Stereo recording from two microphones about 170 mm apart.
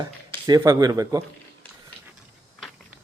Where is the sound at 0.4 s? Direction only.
20° right (ahead or behind).